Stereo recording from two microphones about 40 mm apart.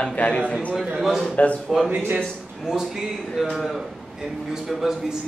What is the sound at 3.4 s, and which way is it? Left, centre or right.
Speech, centre.